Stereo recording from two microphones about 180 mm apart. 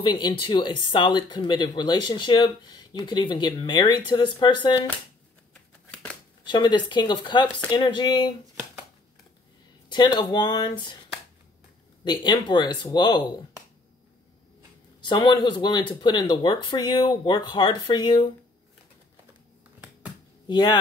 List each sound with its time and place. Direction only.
0.0 s speech: 25° left (ahead or behind)
6.4 s speech: 25° left (ahead or behind)
10.1 s speech: 25° left (ahead or behind)
12.0 s speech: 25° left (ahead or behind)
15.0 s speech: 25° left (ahead or behind)
20.4 s speech: 25° left (ahead or behind)